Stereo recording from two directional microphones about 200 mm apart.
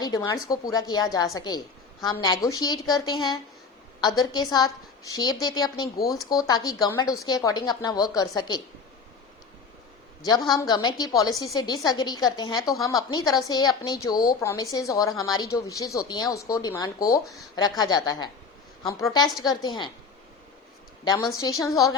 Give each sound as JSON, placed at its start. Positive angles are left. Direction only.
{"t": 0.0, "sound": "a woman's voice", "side_deg": 15}
{"t": 10.2, "sound": "a woman's voice", "side_deg": 20}
{"t": 21.0, "sound": "a woman's voice", "side_deg": 20}